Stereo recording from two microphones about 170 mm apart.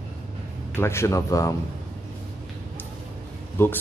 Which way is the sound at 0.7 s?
15° left (ahead or behind).